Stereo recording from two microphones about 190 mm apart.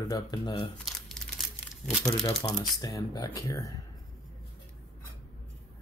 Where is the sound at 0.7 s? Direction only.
Centre (ahead or behind).